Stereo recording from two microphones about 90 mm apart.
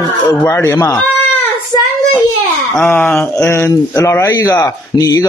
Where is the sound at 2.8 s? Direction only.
20° left (ahead or behind).